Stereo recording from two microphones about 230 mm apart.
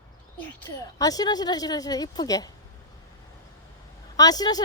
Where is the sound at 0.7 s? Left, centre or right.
Centre.